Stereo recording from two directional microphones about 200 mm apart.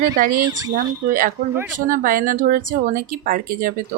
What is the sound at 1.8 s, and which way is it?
Speech, 45° right (ahead or behind).